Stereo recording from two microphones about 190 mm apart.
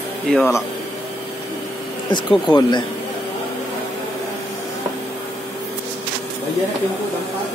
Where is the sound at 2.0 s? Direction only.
25° left (ahead or behind).